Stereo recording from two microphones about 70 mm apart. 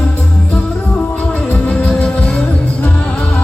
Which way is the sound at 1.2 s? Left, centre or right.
Centre.